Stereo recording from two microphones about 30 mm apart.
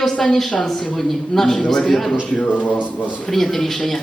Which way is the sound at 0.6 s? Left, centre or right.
Centre.